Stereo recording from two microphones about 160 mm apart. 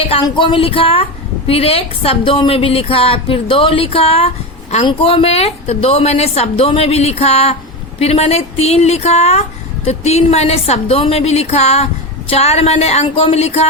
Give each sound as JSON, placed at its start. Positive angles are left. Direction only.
{"t": 0.0, "sound": "a woman's voice", "side_deg": 35}